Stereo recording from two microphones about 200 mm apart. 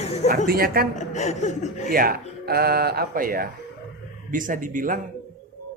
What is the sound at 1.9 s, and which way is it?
Speech, 45° right (ahead or behind).